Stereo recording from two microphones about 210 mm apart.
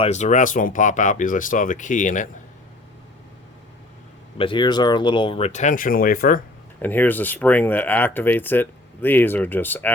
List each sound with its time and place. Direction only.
0.0 s speech: 35° left (ahead or behind)
4.4 s speech: 20° left (ahead or behind); by 6.4 s 40° left (ahead or behind)
6.8 s speech: 10° left (ahead or behind)